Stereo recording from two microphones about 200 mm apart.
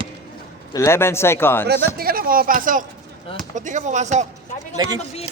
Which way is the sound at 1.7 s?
50° right (ahead or behind).